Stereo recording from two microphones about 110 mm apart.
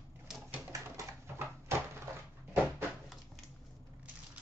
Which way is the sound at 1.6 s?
25° right (ahead or behind).